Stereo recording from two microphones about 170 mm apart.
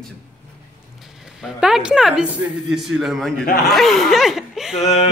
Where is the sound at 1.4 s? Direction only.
5° right (ahead or behind).